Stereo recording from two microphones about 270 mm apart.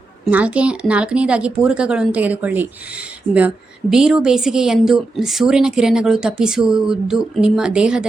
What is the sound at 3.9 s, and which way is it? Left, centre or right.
A woman's voice, centre.